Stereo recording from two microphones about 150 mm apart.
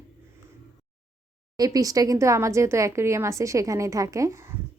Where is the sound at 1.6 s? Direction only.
25° right (ahead or behind).